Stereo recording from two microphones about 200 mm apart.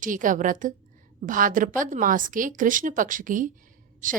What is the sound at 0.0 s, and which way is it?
A woman's voice, 40° right (ahead or behind).